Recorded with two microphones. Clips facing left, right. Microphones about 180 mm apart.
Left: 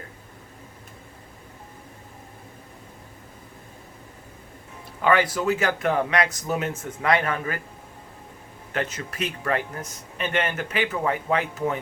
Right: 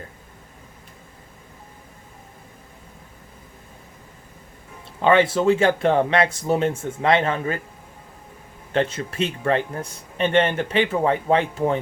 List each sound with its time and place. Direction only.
5.0 s speech: 25° right (ahead or behind)
8.7 s speech: 30° right (ahead or behind)